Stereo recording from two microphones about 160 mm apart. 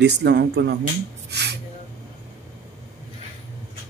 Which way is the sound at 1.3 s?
90° right.